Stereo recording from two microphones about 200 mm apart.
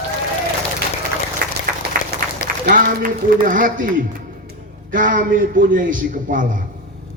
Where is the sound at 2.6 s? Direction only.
40° right (ahead or behind).